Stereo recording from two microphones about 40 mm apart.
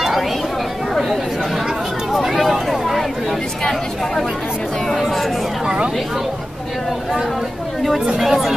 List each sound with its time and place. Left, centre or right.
0.9 s chatter: centre
2.1 s a sound: centre
3.6 s chatter: centre
8.2 s speech: centre